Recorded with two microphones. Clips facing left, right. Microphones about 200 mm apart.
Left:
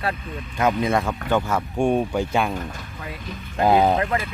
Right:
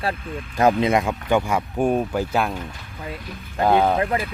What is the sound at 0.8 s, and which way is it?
Speech, 20° right (ahead or behind).